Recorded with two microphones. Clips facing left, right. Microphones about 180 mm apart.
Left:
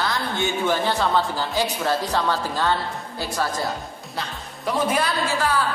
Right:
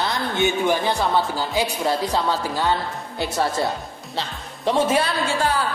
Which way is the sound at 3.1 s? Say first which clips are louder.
Right 4 dB; 25° right (ahead or behind).